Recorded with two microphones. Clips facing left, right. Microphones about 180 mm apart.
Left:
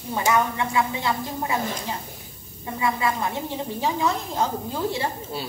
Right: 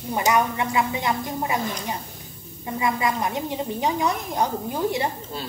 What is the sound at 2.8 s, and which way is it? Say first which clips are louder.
A woman's voice: even; 20° right (ahead or behind).